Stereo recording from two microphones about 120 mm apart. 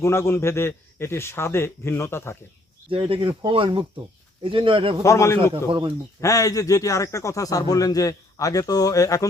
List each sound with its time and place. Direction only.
0.0 s a man's voice: 20° left (ahead or behind)
2.9 s speech: 45° right (ahead or behind)
5.0 s a man's voice: 25° left (ahead or behind)